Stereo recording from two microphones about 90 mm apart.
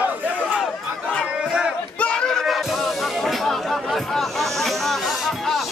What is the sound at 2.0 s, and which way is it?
Speech, 10° left (ahead or behind).